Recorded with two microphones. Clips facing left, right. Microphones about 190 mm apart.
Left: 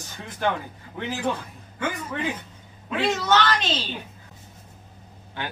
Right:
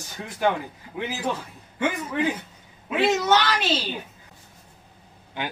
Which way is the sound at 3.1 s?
15° right (ahead or behind).